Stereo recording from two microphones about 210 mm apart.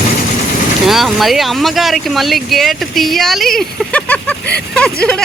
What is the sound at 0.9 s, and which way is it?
Speech, centre (ahead or behind).